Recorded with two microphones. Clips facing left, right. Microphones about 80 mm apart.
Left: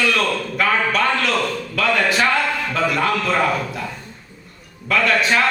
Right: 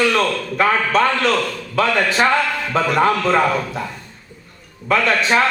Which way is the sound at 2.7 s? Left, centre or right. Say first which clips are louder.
Right 5 dB; right.